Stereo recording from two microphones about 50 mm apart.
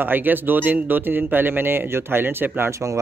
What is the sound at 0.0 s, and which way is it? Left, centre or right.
Speech, right.